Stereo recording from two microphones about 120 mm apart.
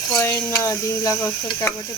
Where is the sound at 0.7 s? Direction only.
25° left (ahead or behind).